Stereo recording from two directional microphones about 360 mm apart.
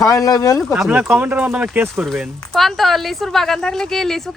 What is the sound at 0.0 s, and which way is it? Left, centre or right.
Speech, centre.